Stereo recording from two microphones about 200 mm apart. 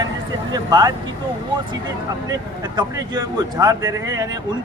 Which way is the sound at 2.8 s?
20° right (ahead or behind).